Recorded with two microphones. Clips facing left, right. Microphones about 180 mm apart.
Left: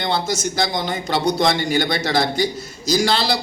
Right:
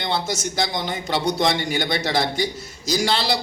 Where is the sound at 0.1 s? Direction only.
20° right (ahead or behind).